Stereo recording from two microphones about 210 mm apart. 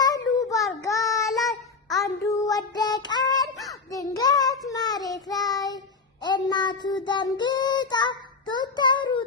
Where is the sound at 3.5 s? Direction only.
Centre (ahead or behind).